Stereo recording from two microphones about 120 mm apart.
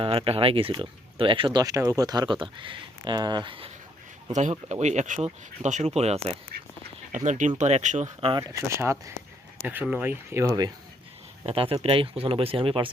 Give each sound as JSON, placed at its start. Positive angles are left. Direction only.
{"t": 0.0, "sound": "speech", "side_deg": -50}
{"t": 4.4, "sound": "speech", "side_deg": -80}
{"t": 7.3, "sound": "speech", "side_deg": -90}
{"t": 7.6, "sound": "speech", "side_deg": -80}
{"t": 8.2, "sound": "speech", "side_deg": -40}
{"t": 8.6, "sound": "speech", "side_deg": -25}
{"t": 11.4, "sound": "speech", "side_deg": -50}